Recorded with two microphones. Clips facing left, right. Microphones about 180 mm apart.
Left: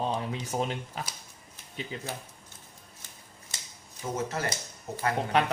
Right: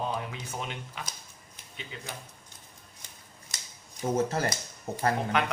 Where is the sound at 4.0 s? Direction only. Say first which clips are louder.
Right 5 dB; 35° right (ahead or behind).